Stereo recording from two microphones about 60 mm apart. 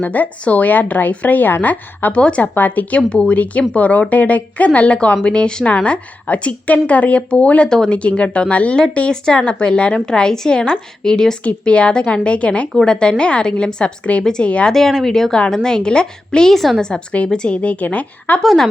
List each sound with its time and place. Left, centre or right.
0.0 s speech: left
14.7 s speech: centre
16.6 s a woman's voice: centre
16.8 s speech: centre
18.4 s speech: centre